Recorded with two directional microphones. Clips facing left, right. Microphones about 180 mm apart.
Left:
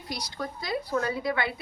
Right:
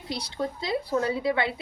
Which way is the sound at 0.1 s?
25° right (ahead or behind).